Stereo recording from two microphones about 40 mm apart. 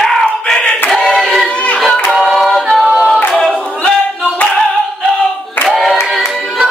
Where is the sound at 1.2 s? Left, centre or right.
Centre.